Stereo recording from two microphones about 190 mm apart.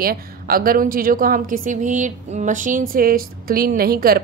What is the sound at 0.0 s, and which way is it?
A woman's voice, 50° right (ahead or behind).